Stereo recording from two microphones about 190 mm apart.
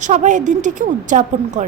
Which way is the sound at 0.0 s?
40° right (ahead or behind).